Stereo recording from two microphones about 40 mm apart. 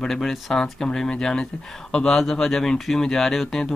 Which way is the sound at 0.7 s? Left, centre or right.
Centre.